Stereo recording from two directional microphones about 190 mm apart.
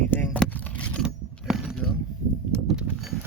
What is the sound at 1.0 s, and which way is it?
Vehicle, 5° right (ahead or behind).